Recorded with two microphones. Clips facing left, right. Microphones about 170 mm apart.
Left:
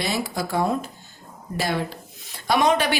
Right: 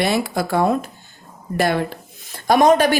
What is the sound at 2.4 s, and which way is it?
Speech, 45° right (ahead or behind).